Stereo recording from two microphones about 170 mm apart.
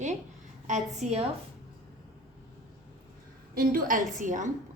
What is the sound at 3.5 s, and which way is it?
Speech, 60° right (ahead or behind).